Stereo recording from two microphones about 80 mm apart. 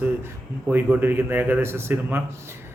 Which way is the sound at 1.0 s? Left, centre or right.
Right.